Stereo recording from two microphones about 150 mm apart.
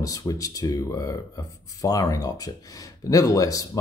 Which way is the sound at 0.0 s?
25° left (ahead or behind).